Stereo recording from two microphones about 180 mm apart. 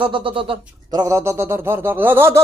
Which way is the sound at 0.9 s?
20° right (ahead or behind).